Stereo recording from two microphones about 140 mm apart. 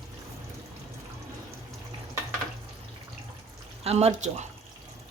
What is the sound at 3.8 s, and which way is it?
Speech, 50° right (ahead or behind).